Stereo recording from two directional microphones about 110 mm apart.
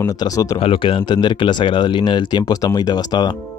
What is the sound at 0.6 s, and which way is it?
Speech, 55° left (ahead or behind).